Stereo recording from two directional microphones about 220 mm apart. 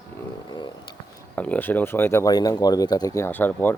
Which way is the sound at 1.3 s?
5° left (ahead or behind).